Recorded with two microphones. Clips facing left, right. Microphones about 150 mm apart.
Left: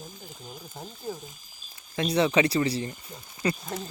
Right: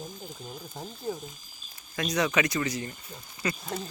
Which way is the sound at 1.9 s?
30° left (ahead or behind).